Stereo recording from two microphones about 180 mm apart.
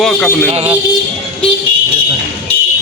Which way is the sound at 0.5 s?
35° right (ahead or behind).